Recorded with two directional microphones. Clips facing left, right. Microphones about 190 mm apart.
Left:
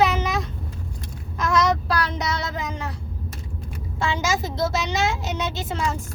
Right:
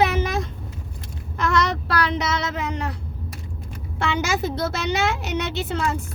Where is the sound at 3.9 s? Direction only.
60° right (ahead or behind).